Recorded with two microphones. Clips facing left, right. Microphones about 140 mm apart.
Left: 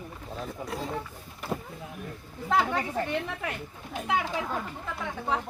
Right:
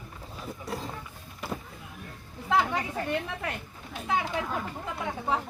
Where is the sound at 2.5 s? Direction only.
Centre (ahead or behind).